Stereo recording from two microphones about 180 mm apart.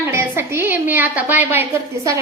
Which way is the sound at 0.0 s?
15° right (ahead or behind).